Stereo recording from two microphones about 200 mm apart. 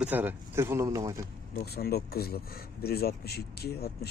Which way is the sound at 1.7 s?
50° left (ahead or behind).